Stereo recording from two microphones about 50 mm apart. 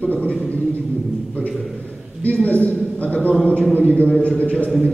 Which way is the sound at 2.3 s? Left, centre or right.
Left.